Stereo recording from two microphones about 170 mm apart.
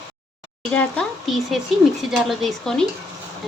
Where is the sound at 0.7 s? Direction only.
5° left (ahead or behind).